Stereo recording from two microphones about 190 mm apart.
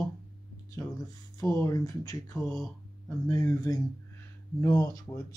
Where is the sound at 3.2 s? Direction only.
20° left (ahead or behind).